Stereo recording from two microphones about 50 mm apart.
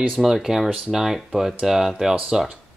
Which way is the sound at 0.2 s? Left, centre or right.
Centre.